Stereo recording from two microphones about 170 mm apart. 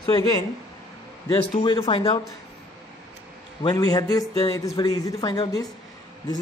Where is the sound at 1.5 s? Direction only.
30° left (ahead or behind).